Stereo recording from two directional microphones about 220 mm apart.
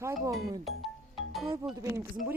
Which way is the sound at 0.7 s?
Centre (ahead or behind).